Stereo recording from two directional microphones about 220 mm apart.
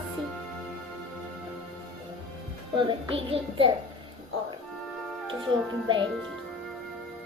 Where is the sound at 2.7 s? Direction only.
25° right (ahead or behind).